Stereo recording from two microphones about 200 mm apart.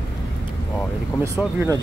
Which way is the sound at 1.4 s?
10° right (ahead or behind).